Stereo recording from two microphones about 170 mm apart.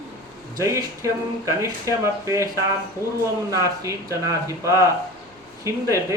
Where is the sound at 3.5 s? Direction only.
20° right (ahead or behind).